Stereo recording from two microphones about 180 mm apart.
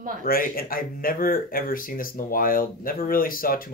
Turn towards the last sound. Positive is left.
turn(degrees=50)  # may be behind; listen again after turning